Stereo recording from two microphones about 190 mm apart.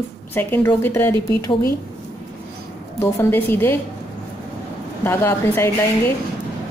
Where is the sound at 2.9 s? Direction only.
15° left (ahead or behind).